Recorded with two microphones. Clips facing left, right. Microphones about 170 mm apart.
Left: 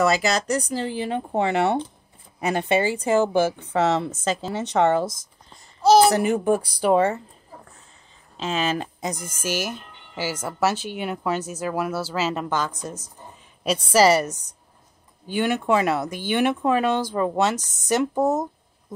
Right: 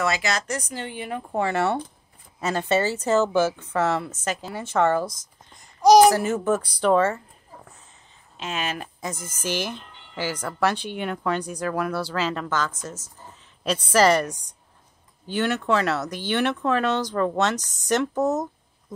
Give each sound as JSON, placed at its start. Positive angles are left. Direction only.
{"t": 0.1, "sound": "a woman's voice", "side_deg": 35}
{"t": 5.8, "sound": "speech", "side_deg": -15}
{"t": 6.1, "sound": "speech", "side_deg": 15}
{"t": 8.4, "sound": "speech", "side_deg": 30}
{"t": 9.0, "sound": "a woman's voice", "side_deg": 15}
{"t": 18.2, "sound": "a woman's voice", "side_deg": 25}